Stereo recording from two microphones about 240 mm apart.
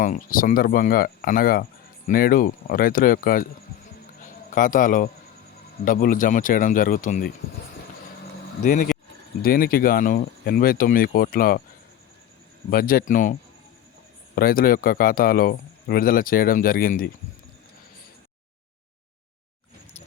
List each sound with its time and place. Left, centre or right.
0.0 s speech: left
4.5 s speech: left
8.6 s speech: left
12.7 s speech: left
14.3 s speech: left